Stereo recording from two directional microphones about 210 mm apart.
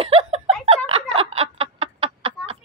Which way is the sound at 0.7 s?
30° right (ahead or behind).